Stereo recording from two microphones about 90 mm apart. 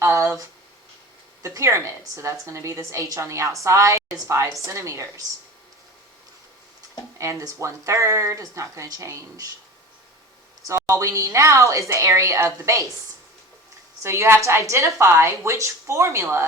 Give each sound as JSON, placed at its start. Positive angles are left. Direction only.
{"t": 0.0, "sound": "a sound", "side_deg": -30}
{"t": 1.4, "sound": "a woman's voice", "side_deg": -35}
{"t": 7.2, "sound": "a woman's voice", "side_deg": -35}
{"t": 10.7, "sound": "a woman's voice", "side_deg": -35}
{"t": 14.0, "sound": "a woman's voice", "side_deg": -30}